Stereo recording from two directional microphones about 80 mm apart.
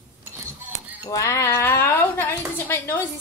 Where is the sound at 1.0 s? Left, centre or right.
Left.